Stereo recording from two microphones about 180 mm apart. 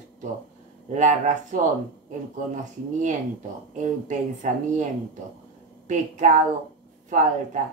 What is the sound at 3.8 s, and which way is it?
Speech, 40° right (ahead or behind).